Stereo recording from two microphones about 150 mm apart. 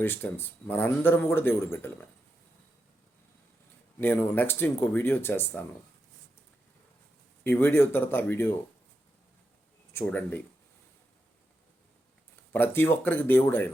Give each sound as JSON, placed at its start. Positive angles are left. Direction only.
{"t": 0.0, "sound": "speech", "side_deg": 15}
{"t": 4.0, "sound": "speech", "side_deg": 15}
{"t": 7.4, "sound": "speech", "side_deg": 15}
{"t": 9.9, "sound": "speech", "side_deg": 15}
{"t": 12.5, "sound": "speech", "side_deg": 15}